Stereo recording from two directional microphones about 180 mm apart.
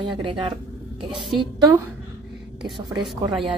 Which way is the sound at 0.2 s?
25° right (ahead or behind).